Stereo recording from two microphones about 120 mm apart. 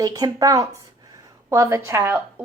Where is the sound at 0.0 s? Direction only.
30° right (ahead or behind).